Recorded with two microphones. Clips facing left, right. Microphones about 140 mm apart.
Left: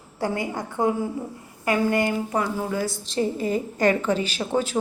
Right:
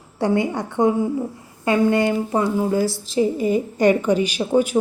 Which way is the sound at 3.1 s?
15° right (ahead or behind).